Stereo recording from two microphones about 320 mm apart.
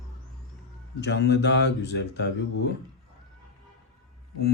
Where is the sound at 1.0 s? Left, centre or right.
Left.